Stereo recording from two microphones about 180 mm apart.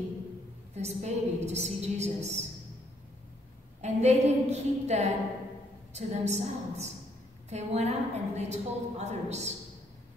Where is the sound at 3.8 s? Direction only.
40° right (ahead or behind).